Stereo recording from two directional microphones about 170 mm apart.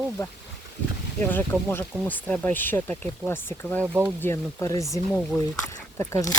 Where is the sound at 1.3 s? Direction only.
10° left (ahead or behind).